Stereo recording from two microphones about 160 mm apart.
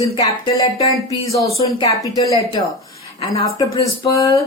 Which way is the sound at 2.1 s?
25° left (ahead or behind).